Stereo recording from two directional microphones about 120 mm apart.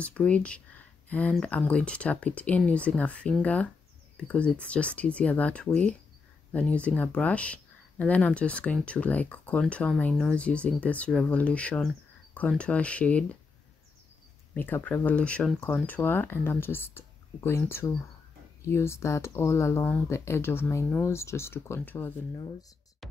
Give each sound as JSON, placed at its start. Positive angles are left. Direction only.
{"t": 0.0, "sound": "speech", "side_deg": 10}
{"t": 1.0, "sound": "a sound", "side_deg": 15}
{"t": 1.4, "sound": "speech", "side_deg": 10}
{"t": 14.5, "sound": "speech", "side_deg": 15}